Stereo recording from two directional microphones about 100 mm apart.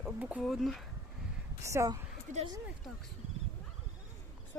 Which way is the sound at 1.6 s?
30° right (ahead or behind).